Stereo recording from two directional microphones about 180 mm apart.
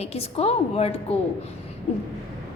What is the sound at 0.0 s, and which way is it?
Speech, 35° left (ahead or behind).